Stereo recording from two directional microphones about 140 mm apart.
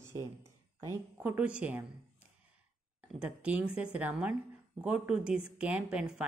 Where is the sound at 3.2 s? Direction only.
10° right (ahead or behind).